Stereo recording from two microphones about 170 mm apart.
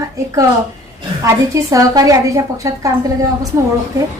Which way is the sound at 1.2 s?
20° right (ahead or behind).